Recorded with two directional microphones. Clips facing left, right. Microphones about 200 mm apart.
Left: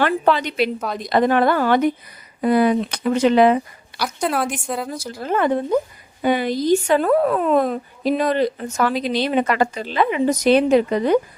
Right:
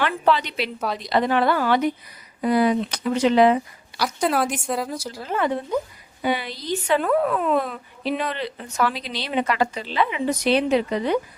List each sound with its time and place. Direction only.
0.0 s a woman's voice: 45° left (ahead or behind)
4.0 s a woman's voice: centre (ahead or behind)
5.2 s a woman's voice: 50° left (ahead or behind)